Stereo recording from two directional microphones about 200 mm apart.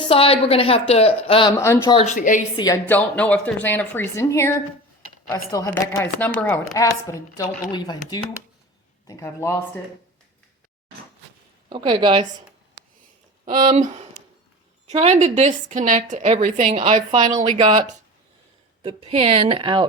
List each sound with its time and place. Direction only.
0.0 s a woman's voice: 25° left (ahead or behind)
1.5 s speech: 15° left (ahead or behind)
2.0 s a woman's voice: 40° left (ahead or behind)
2.6 s a woman's voice: 15° left (ahead or behind)
9.0 s speech: 15° left (ahead or behind)
11.7 s a woman's voice: 25° right (ahead or behind)
13.7 s a woman's voice: 35° right (ahead or behind)
17.2 s a woman's voice: 20° right (ahead or behind)
17.6 s a woman's voice: 35° right (ahead or behind)